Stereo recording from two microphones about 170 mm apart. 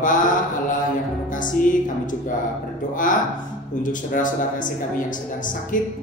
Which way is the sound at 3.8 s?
50° left (ahead or behind).